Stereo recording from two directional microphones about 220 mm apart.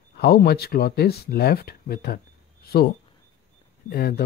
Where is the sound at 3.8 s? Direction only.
45° left (ahead or behind).